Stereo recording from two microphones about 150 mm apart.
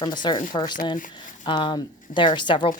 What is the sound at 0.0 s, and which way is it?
A woman's voice, 30° left (ahead or behind).